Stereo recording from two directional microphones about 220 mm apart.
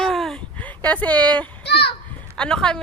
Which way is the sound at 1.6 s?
50° left (ahead or behind).